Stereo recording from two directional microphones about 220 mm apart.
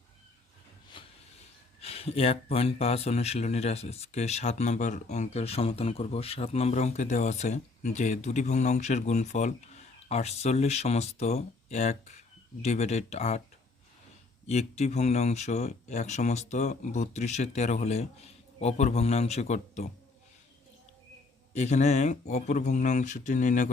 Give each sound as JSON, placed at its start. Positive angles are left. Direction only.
{"t": 0.9, "sound": "hiss", "side_deg": 20}
{"t": 1.8, "sound": "speech", "side_deg": 25}
{"t": 14.4, "sound": "speech", "side_deg": 30}
{"t": 21.5, "sound": "speech", "side_deg": 30}